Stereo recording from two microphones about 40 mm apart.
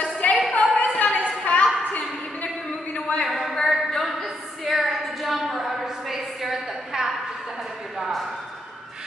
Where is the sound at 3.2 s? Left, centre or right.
Centre.